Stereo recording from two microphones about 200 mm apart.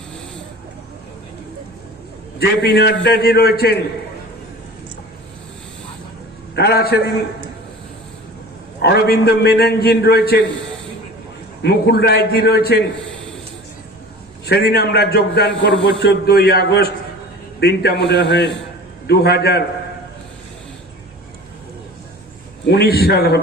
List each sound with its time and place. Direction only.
2.4 s a man's voice: 55° left (ahead or behind)
6.6 s a man's voice: 55° left (ahead or behind)
8.8 s a man's voice: 50° left (ahead or behind)
11.6 s a man's voice: 55° left (ahead or behind)
14.4 s a man's voice: 50° left (ahead or behind)
22.6 s a man's voice: 55° left (ahead or behind)